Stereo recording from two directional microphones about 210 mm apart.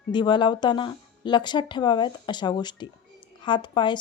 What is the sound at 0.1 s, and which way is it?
Speech, 20° left (ahead or behind).